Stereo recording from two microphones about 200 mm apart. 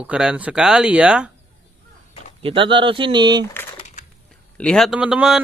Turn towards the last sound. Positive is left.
turn(degrees=-5)  # may be behind; listen again after turning